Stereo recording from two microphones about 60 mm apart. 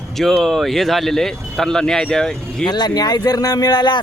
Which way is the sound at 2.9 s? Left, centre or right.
Left.